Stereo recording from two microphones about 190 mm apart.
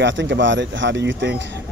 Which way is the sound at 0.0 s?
70° right (ahead or behind).